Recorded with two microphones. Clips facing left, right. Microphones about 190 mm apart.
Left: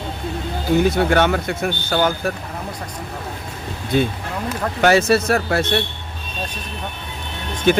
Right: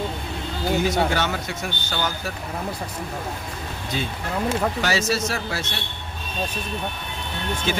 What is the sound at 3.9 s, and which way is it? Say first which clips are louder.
Speech: left 7 dB; 55° left (ahead or behind).